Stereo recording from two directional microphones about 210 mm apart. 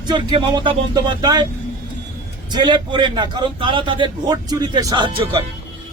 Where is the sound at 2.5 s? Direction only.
20° right (ahead or behind).